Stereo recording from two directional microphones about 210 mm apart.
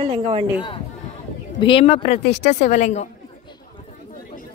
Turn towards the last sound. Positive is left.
turn(degrees=35)  # may be behind; listen again after turning